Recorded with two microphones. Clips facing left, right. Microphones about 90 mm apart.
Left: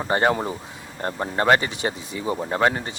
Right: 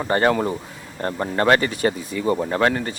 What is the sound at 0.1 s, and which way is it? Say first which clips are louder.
Speech: right 2 dB; 25° left (ahead or behind).